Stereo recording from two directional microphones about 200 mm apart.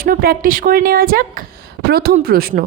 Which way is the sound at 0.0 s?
45° right (ahead or behind).